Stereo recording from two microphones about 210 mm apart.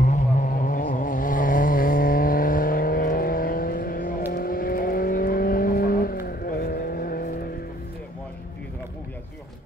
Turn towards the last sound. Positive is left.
turn(degrees=45)  # may be behind; listen again after turning